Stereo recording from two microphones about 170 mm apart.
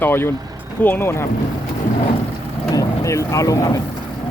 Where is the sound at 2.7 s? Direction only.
20° left (ahead or behind).